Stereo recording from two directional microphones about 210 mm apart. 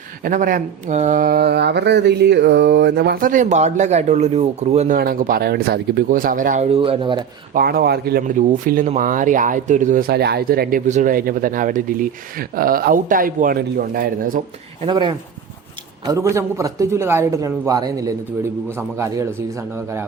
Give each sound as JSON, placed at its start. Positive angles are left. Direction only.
{"t": 0.3, "sound": "speech", "side_deg": -40}
{"t": 4.9, "sound": "speech", "side_deg": -45}
{"t": 7.5, "sound": "speech", "side_deg": -45}
{"t": 14.8, "sound": "a man's voice", "side_deg": -20}